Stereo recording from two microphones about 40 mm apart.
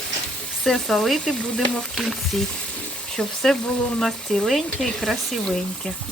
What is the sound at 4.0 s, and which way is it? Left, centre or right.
Sizzle, centre.